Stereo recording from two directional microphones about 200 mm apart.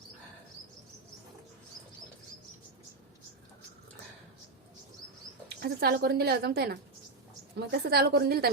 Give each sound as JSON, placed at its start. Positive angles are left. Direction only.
{"t": 5.6, "sound": "a woman's voice", "side_deg": -50}